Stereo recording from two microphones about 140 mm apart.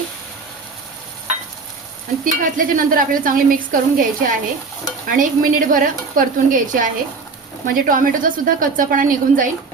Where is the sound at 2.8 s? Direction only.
80° right.